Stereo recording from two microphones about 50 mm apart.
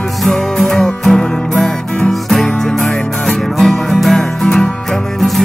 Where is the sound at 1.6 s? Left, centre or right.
Centre.